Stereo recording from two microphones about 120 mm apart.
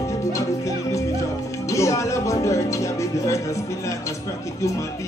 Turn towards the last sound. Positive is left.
turn(degrees=25)  # may be behind; listen again after turning